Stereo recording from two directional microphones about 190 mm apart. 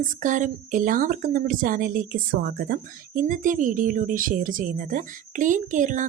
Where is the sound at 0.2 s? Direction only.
40° right (ahead or behind).